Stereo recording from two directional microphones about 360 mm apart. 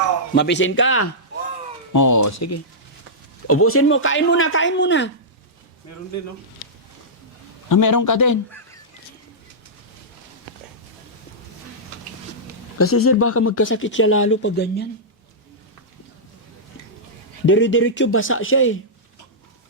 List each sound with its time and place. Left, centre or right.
0.3 s speech: left
1.9 s speech: left
3.4 s speech: left
5.9 s speech: left
7.7 s a man's voice: left
13.0 s speech: left
17.4 s speech: left